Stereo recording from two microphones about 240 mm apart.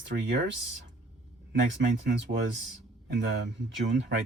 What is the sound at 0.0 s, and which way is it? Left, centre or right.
Speech, right.